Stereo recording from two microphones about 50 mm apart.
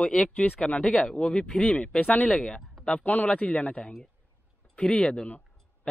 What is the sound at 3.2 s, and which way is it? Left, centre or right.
Speech, left.